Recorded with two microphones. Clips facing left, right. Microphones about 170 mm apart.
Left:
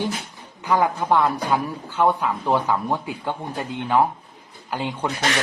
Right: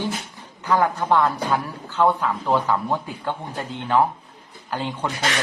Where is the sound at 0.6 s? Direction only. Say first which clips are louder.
Even; 15° left (ahead or behind).